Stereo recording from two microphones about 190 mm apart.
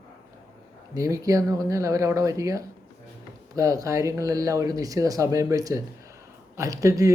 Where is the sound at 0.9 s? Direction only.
15° right (ahead or behind).